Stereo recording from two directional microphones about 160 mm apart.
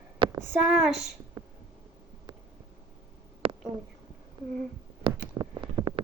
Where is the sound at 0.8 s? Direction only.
Centre (ahead or behind).